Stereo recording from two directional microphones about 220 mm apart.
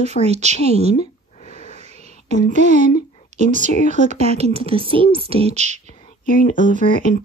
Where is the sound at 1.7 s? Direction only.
30° right (ahead or behind).